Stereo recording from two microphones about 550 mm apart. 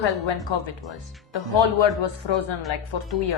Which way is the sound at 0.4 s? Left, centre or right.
Left.